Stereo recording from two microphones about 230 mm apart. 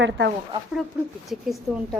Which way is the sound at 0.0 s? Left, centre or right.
Right.